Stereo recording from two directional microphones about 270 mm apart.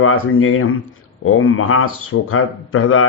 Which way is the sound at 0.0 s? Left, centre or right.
Left.